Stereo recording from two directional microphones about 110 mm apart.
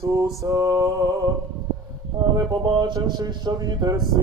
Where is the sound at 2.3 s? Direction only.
30° right (ahead or behind).